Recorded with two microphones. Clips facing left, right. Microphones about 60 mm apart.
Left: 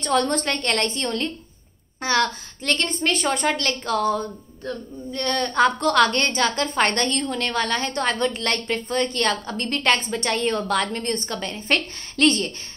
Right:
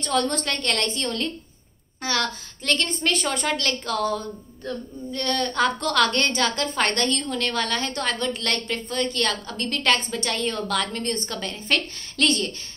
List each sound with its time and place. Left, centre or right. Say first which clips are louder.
0.1 s a woman's voice: left 2 dB; left
10.9 s a woman's voice: left 2 dB; centre